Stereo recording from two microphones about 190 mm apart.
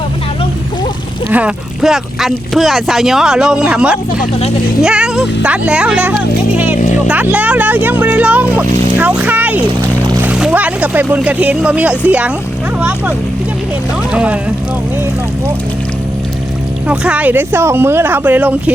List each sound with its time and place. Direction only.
1.3 s speech: 5° right (ahead or behind)
4.2 s speech: 35° left (ahead or behind)
4.8 s speech: 5° right (ahead or behind)
14.1 s speech: 5° right (ahead or behind)
16.9 s speech: 5° right (ahead or behind)